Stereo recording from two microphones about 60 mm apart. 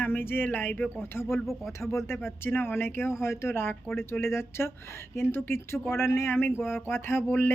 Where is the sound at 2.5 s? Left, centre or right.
Left.